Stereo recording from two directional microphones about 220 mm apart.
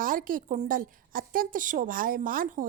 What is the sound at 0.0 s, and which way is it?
A woman's voice, 40° right (ahead or behind).